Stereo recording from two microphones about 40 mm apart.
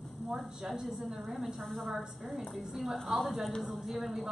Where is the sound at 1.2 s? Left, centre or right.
Right.